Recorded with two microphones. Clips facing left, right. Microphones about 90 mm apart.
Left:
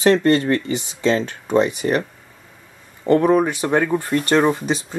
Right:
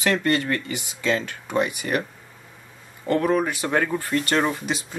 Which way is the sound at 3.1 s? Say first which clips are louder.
Left 6 dB; 25° left (ahead or behind).